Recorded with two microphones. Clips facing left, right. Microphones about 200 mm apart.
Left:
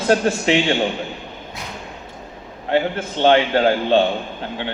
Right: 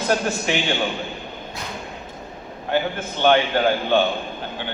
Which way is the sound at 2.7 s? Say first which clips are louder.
Left 3 dB; 30° left (ahead or behind).